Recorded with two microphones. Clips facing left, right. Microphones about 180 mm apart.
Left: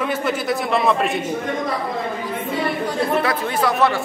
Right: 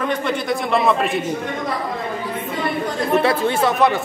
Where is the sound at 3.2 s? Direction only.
25° right (ahead or behind).